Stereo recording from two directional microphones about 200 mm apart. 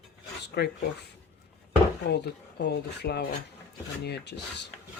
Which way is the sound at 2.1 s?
55° left (ahead or behind).